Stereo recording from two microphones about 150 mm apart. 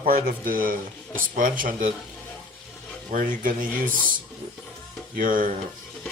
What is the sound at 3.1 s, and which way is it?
Speech, 65° right (ahead or behind).